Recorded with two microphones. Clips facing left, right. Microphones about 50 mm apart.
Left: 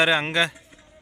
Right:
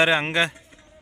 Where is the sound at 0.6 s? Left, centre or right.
Centre.